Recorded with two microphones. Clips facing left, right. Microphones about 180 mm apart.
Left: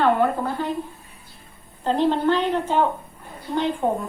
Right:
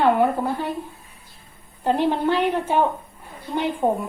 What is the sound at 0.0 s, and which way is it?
Speech, 15° right (ahead or behind).